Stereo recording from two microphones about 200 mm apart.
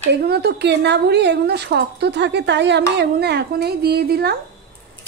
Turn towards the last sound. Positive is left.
turn(degrees=-55)  # may be behind; listen again after turning